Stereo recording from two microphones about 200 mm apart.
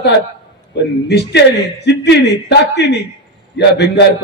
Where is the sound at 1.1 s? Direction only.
60° left (ahead or behind).